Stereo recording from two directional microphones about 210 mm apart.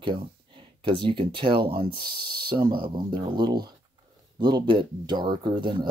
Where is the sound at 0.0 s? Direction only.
25° right (ahead or behind).